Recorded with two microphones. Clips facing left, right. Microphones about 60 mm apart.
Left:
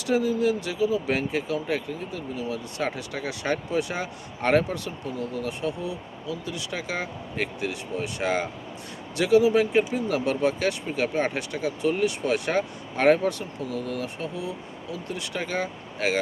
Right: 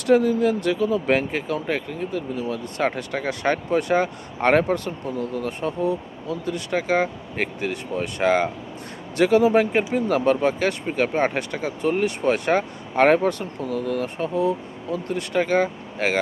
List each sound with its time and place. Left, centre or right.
0.0 s speech: right